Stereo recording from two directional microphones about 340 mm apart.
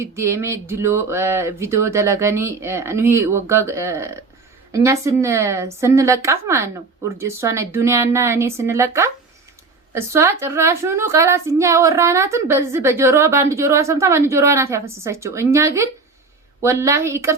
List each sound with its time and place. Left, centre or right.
0.0 s a woman's voice: centre